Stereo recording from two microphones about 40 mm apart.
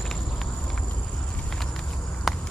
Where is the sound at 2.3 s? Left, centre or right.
Centre.